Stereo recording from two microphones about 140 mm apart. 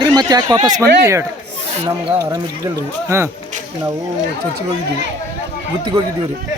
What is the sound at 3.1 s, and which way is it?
Speech, 20° right (ahead or behind).